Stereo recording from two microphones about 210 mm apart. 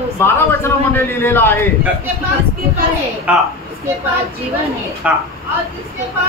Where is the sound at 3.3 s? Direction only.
5° right (ahead or behind).